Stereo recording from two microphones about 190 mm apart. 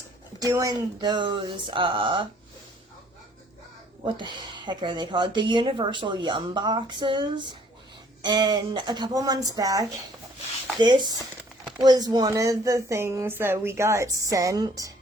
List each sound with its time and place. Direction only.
0.4 s speech: 20° right (ahead or behind)
4.0 s a woman's voice: 25° right (ahead or behind)